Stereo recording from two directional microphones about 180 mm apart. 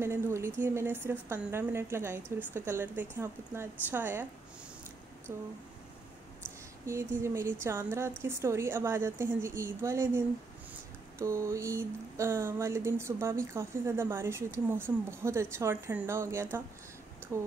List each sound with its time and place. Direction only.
0.0 s a woman's voice: 15° right (ahead or behind)
5.3 s a woman's voice: 15° right (ahead or behind)
17.2 s a sound: 15° right (ahead or behind)